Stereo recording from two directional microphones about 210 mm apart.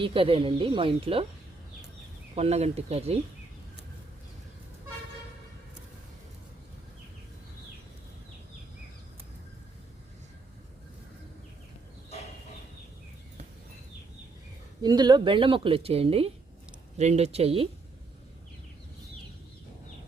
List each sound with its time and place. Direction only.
0.0 s speech: 25° right (ahead or behind)
2.3 s speech: 30° right (ahead or behind)
14.8 s speech: 20° right (ahead or behind)